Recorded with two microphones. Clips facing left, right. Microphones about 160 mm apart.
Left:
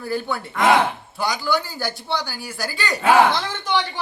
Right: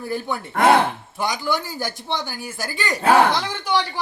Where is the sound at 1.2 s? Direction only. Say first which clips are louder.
Left 1 dB; 20° right (ahead or behind).